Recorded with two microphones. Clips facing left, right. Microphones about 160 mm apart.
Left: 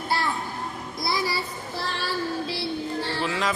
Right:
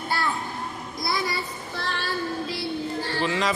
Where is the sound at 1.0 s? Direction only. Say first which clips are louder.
Left 1 dB; 30° left (ahead or behind).